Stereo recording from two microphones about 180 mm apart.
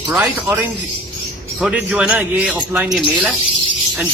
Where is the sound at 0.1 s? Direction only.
10° right (ahead or behind).